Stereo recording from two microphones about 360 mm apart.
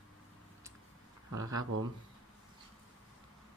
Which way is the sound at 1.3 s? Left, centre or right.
Right.